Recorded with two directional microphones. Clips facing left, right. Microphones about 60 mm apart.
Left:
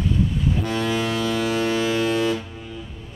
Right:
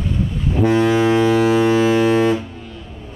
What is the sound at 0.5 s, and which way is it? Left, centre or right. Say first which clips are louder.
Ship: right 8 dB; right.